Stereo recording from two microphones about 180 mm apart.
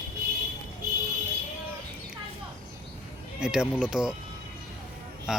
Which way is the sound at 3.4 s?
5° right (ahead or behind).